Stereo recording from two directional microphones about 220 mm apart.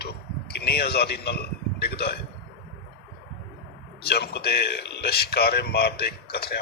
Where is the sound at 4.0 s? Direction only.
45° left (ahead or behind).